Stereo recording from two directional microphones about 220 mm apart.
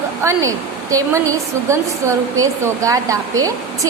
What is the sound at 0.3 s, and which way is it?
A woman's voice, 15° right (ahead or behind).